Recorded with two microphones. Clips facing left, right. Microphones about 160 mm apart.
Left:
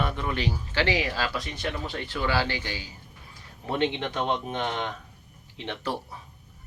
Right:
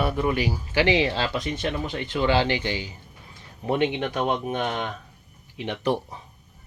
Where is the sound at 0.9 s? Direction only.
25° right (ahead or behind).